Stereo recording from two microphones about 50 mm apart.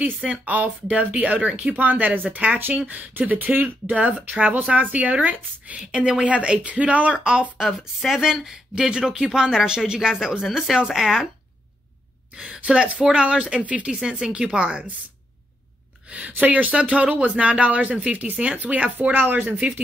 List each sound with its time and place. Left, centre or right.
0.3 s a woman's voice: right
2.9 s a woman's voice: right
7.5 s speech: centre
12.4 s a woman's voice: right
13.8 s a woman's voice: centre
16.1 s a woman's voice: right
19.1 s speech: right